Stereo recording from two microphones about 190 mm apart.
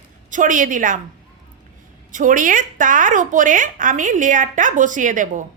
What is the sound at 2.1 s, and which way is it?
A woman's voice, 45° right (ahead or behind).